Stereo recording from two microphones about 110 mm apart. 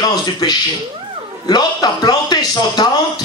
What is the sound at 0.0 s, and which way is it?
A man's voice, 40° left (ahead or behind).